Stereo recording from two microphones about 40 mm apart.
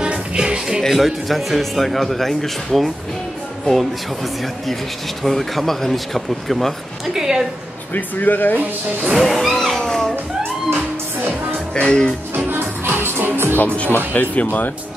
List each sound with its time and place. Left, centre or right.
0.0 s music: right
0.8 s speech: centre
7.2 s a woman's voice: centre
7.9 s speech: left
9.1 s speech: centre
9.8 s a sound: centre
10.7 s music: right
11.7 s speech: centre
12.4 s music: right
14.1 s speech: left